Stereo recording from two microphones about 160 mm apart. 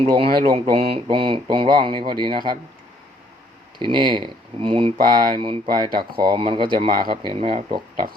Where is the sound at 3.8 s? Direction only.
30° right (ahead or behind).